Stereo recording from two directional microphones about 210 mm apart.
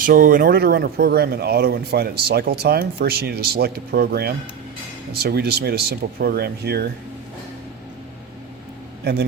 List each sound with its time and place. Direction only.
0.0 s speech: 40° right (ahead or behind)